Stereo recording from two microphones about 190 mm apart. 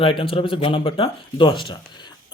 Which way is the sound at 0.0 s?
30° left (ahead or behind).